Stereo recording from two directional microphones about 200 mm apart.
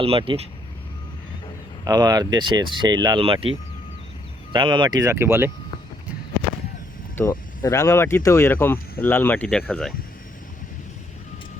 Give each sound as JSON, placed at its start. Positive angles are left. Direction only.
{"t": 0.0, "sound": "speech", "side_deg": -25}
{"t": 1.8, "sound": "speech", "side_deg": -20}
{"t": 4.5, "sound": "speech", "side_deg": -25}
{"t": 7.2, "sound": "speech", "side_deg": 15}